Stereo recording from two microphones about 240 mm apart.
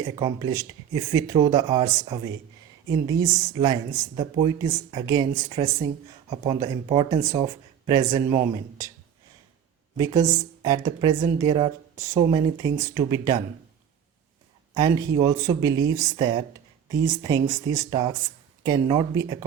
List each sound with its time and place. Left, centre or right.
0.0 s a woman's voice: centre
10.0 s a woman's voice: centre
14.7 s a woman's voice: centre